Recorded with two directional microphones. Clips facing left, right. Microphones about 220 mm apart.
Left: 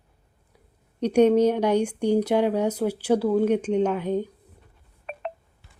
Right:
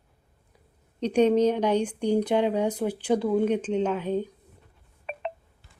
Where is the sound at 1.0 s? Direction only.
10° left (ahead or behind).